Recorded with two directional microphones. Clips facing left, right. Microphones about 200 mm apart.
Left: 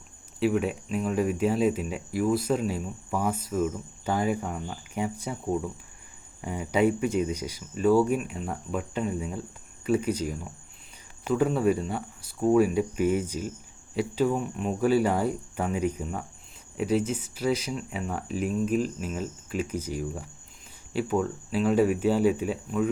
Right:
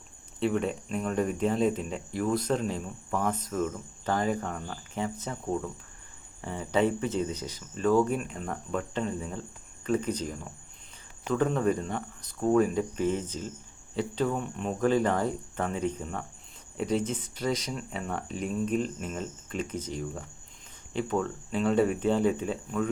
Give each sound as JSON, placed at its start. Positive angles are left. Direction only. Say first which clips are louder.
{"t": 0.3, "sound": "speech", "louder": "left 3 dB", "side_deg": 5}